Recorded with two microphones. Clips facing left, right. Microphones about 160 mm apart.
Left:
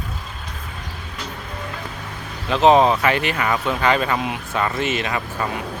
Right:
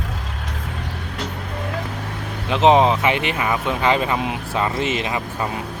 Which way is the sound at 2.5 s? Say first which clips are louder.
Even; 20° right (ahead or behind).